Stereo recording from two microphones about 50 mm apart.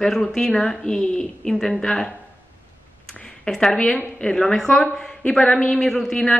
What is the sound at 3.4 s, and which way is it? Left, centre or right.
A woman's voice, centre.